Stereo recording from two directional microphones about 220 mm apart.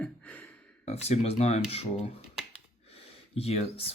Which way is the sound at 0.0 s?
5° left (ahead or behind).